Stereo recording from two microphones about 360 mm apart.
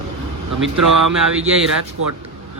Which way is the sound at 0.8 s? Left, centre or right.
Right.